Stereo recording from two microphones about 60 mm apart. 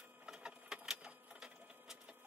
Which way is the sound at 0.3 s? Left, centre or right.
Centre.